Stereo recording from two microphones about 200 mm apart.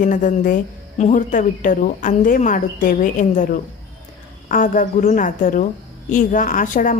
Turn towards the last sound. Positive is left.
turn(degrees=40)  # may be behind; listen again after turning